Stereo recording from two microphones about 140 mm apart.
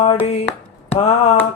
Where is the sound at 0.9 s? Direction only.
50° left (ahead or behind).